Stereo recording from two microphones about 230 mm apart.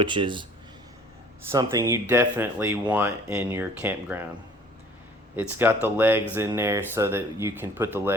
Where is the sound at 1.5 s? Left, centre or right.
Centre.